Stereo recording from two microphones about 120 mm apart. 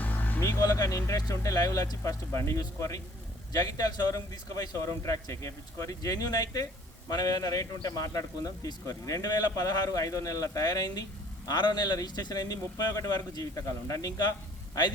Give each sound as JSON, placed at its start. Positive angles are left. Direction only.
{"t": 0.0, "sound": "vehicle", "side_deg": 15}
{"t": 0.6, "sound": "a man's voice", "side_deg": 30}